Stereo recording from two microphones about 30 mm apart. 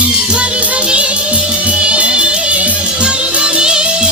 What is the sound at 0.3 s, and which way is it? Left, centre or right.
Music, right.